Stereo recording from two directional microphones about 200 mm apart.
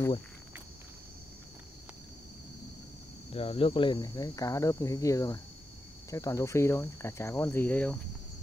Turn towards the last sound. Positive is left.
turn(degrees=10)  # may be behind; listen again after turning